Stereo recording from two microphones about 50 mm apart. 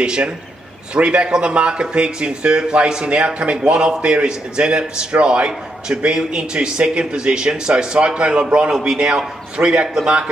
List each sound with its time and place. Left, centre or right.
0.0 s a man's voice: centre